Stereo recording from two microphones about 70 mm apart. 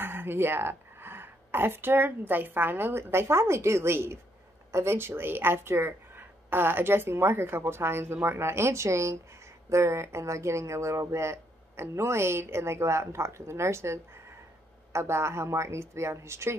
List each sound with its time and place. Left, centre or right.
0.0 s speech: right